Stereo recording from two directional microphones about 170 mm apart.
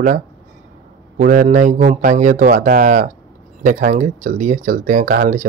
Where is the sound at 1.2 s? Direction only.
50° right (ahead or behind).